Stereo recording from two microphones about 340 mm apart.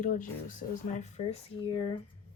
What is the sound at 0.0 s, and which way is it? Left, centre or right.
Speech, left.